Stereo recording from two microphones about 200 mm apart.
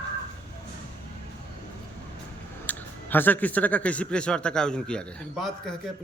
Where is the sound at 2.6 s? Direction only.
10° left (ahead or behind).